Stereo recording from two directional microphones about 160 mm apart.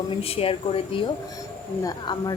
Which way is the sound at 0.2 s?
35° left (ahead or behind).